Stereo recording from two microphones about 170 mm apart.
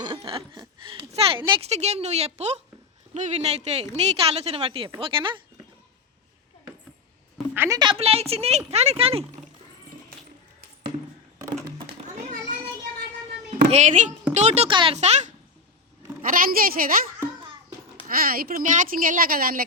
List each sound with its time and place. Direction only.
0.3 s a woman's voice: 35° right (ahead or behind)
7.5 s a woman's voice: 15° right (ahead or behind)
7.8 s a woman's voice: 30° right (ahead or behind)
11.9 s children playing: 45° right (ahead or behind)
13.7 s a woman's voice: 45° right (ahead or behind)
14.7 s speech: 30° right (ahead or behind)
14.9 s a woman's voice: 40° right (ahead or behind)
16.3 s speech: 55° right (ahead or behind)
18.1 s speech: 60° right (ahead or behind)